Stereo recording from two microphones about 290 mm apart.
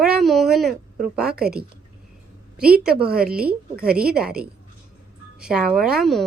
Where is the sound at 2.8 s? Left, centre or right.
Centre.